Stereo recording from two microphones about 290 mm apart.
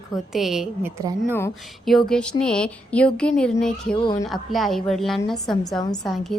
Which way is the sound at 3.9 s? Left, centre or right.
Centre.